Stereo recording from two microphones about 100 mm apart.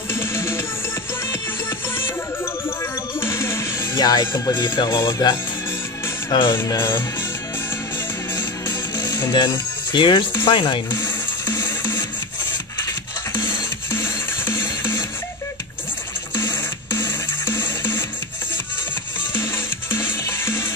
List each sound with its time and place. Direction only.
0.1 s music: 25° left (ahead or behind)
3.2 s music: 25° left (ahead or behind)
4.0 s speech: 45° left (ahead or behind)
6.3 s music: 55° left (ahead or behind)
6.6 s music: 30° left (ahead or behind)
9.3 s speech: 50° left (ahead or behind)
11.0 s music: 25° left (ahead or behind)
13.5 s music: 25° left (ahead or behind)
16.3 s music: 25° left (ahead or behind)
19.3 s music: 25° left (ahead or behind)